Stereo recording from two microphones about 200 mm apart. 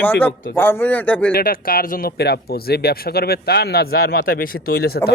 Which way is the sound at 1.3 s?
50° left (ahead or behind).